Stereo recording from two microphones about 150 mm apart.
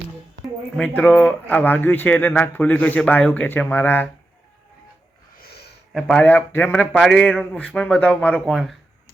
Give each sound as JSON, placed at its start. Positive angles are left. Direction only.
{"t": 0.8, "sound": "speech", "side_deg": 10}
{"t": 5.4, "sound": "a sound", "side_deg": 90}
{"t": 5.9, "sound": "speech", "side_deg": 0}